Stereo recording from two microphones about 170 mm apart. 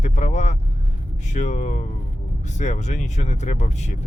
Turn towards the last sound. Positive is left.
turn(degrees=40)  # may be behind; listen again after turning